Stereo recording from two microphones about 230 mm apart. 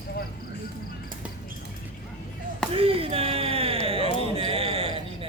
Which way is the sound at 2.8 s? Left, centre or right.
Right.